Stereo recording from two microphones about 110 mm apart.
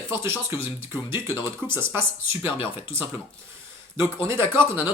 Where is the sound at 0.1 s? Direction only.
25° right (ahead or behind).